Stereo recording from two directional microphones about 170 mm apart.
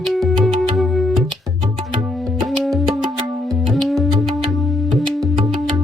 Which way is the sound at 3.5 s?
Centre (ahead or behind).